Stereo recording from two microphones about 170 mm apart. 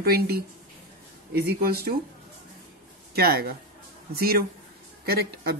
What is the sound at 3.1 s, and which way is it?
Speech, 65° right (ahead or behind).